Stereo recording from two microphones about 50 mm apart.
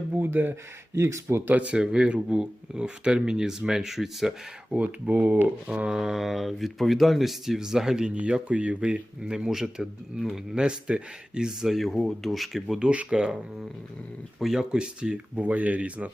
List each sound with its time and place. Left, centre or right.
0.1 s speech: right
0.9 s speech: right
1.5 s speech: right; by 4.4 s centre
4.7 s speech: right
5.6 s speech: right
6.0 s speech: centre
8.1 s speech: right
11.8 s speech: centre
12.8 s speech: right
14.3 s speech: centre
15.4 s speech: right